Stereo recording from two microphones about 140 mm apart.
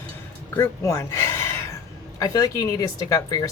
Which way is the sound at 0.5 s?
20° left (ahead or behind).